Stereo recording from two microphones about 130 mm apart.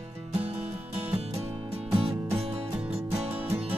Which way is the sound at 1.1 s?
50° right (ahead or behind).